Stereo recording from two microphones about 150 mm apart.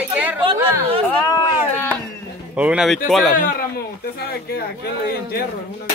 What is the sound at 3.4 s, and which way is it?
Speech, 75° left (ahead or behind).